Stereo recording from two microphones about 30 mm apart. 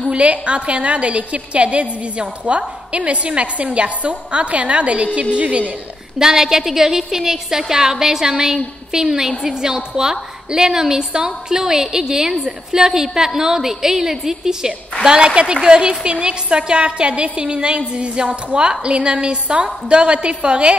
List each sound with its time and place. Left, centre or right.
0.1 s a woman's voice: right
6.1 s a woman's voice: centre
15.0 s a woman's voice: right